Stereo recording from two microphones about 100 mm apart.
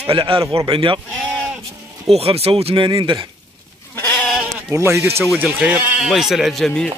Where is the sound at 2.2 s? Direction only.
80° right.